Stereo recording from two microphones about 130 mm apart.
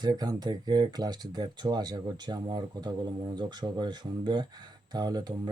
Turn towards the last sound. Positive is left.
turn(degrees=-30)  # may be behind; listen again after turning